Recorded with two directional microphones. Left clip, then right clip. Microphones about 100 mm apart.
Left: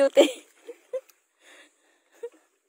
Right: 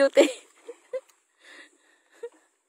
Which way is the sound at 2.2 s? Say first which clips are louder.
Left 1 dB; 30° right (ahead or behind).